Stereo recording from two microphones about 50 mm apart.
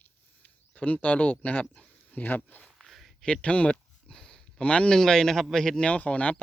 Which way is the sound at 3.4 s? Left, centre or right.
Left.